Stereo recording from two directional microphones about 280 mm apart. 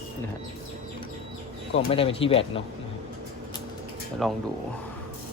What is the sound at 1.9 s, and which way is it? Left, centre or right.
Speech, centre.